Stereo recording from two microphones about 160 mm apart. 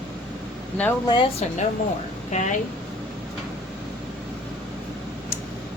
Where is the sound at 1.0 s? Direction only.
25° left (ahead or behind).